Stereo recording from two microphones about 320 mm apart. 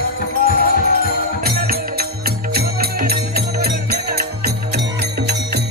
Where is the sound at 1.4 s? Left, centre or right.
Right.